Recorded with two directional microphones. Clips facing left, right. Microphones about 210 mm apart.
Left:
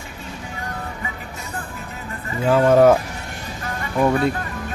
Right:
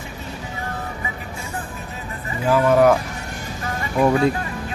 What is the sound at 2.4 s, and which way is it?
Speech, 25° left (ahead or behind).